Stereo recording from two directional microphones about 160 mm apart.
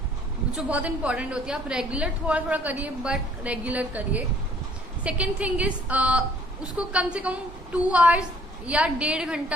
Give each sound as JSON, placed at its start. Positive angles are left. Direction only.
{"t": 0.5, "sound": "a woman's voice", "side_deg": -10}